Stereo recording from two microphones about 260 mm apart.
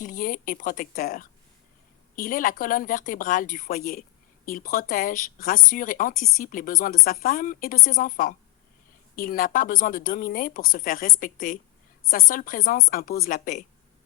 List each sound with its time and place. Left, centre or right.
0.0 s speech: left